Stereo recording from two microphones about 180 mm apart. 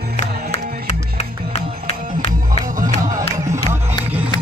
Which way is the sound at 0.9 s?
40° left (ahead or behind).